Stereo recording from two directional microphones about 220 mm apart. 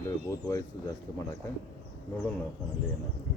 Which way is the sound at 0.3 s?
15° left (ahead or behind).